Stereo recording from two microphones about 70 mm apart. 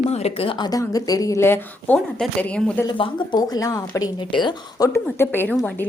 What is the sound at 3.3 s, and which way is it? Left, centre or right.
Speech, left.